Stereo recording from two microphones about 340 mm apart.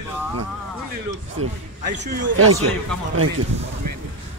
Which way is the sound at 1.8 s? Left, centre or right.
Right.